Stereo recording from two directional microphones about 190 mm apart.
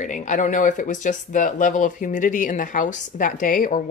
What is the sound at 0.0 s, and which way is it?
Speech, 40° left (ahead or behind).